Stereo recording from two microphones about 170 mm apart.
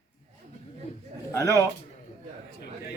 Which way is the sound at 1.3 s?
20° left (ahead or behind).